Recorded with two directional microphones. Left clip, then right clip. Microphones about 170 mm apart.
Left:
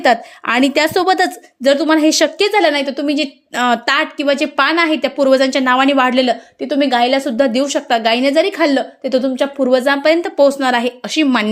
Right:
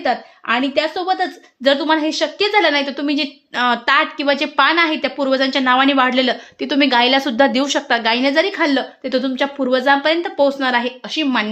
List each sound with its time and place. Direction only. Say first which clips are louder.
0.0 s a woman's voice: left 6 dB; 40° left (ahead or behind)
1.6 s a woman's voice: left 3 dB; 25° left (ahead or behind)
2.4 s a woman's voice: right 3 dB; 20° left (ahead or behind)
6.6 s a woman's voice: even; centre (ahead or behind); by 10.9 s 25° left (ahead or behind)
11.0 s a woman's voice: left 4 dB; 35° left (ahead or behind)